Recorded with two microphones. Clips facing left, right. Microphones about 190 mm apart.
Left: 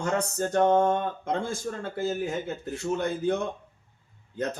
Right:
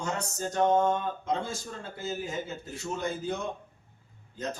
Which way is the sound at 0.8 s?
55° left (ahead or behind).